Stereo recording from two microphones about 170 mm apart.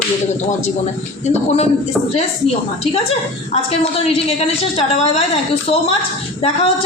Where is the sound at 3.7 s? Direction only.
35° left (ahead or behind).